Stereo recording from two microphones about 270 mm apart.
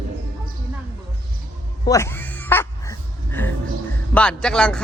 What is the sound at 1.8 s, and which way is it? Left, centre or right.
Dog, centre.